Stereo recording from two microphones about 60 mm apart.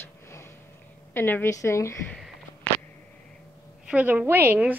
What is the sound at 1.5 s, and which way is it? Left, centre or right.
Speech, left.